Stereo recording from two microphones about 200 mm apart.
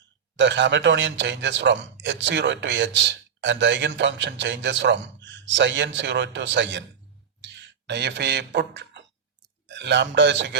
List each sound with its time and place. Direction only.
0.3 s speech: 65° right (ahead or behind)
7.4 s a sound: 60° right (ahead or behind)
9.6 s a man's voice: 60° right (ahead or behind)